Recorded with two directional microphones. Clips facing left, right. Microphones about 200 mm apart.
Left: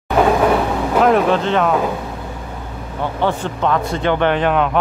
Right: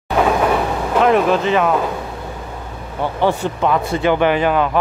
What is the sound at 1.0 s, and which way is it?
Speech, centre (ahead or behind).